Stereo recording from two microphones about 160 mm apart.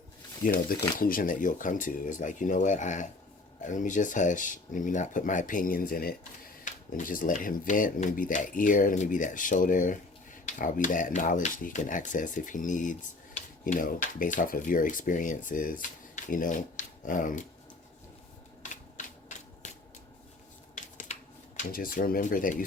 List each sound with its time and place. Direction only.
0.4 s speech: 65° left (ahead or behind)
6.7 s speech: 55° left (ahead or behind)
18.6 s camera: 50° left (ahead or behind)
19.6 s shuffling cards: 45° left (ahead or behind)
20.7 s a sound: 50° left (ahead or behind)